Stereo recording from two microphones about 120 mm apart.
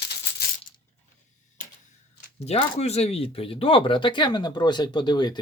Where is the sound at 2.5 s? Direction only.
60° left (ahead or behind).